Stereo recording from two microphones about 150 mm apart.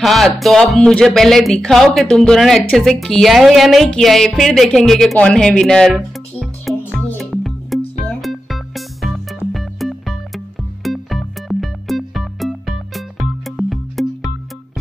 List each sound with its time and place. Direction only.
0.0 s speech: centre (ahead or behind)
6.8 s music: 10° left (ahead or behind)
7.2 s music: centre (ahead or behind)